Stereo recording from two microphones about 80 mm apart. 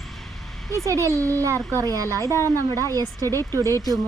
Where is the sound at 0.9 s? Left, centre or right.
Right.